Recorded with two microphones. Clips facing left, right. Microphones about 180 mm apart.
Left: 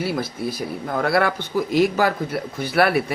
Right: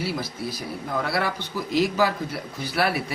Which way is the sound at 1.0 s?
55° left (ahead or behind).